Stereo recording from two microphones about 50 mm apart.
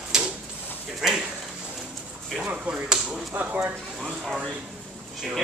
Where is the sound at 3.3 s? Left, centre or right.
Right.